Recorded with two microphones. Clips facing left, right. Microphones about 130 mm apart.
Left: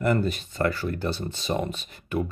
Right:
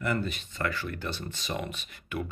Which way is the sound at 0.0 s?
40° left (ahead or behind).